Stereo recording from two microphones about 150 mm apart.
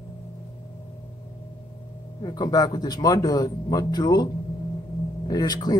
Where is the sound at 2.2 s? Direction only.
25° left (ahead or behind).